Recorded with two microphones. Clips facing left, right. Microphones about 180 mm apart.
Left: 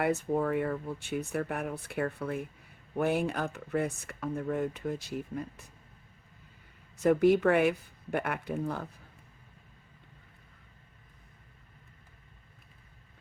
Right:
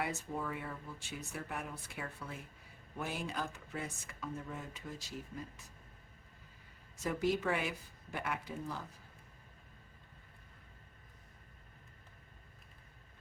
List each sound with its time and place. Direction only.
0.0 s speech: 60° left (ahead or behind)
7.0 s speech: 60° left (ahead or behind)